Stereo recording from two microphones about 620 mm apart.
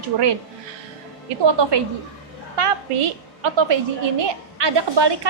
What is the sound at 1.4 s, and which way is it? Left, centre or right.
Speech, right.